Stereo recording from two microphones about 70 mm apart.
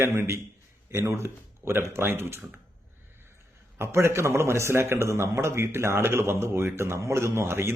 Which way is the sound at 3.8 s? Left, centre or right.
Right.